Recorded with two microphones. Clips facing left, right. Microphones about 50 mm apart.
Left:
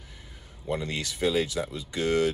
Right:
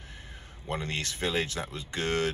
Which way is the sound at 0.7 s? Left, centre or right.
Right.